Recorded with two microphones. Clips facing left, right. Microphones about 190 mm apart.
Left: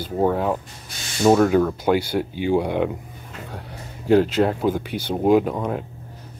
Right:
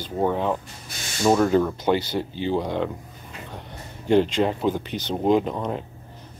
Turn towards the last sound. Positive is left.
turn(degrees=5)  # may be behind; listen again after turning